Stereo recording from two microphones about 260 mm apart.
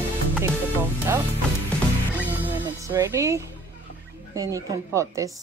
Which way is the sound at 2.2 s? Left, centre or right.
Centre.